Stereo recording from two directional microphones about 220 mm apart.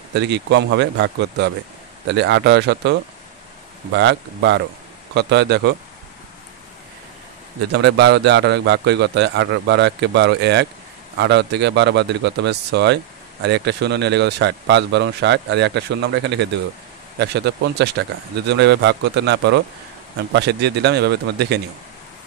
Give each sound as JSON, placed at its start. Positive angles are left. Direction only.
{"t": 0.1, "sound": "a man's voice", "side_deg": -50}
{"t": 7.7, "sound": "a man's voice", "side_deg": -50}